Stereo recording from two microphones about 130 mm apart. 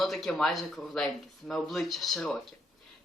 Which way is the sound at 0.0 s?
Centre (ahead or behind).